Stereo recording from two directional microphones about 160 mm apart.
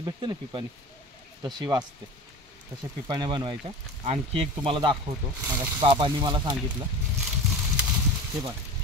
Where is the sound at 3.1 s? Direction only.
25° right (ahead or behind).